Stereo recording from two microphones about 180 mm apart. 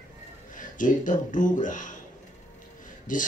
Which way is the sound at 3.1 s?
45° left (ahead or behind).